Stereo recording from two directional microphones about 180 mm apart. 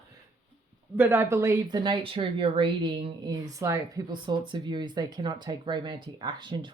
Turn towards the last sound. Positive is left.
turn(degrees=-25)  # may be behind; listen again after turning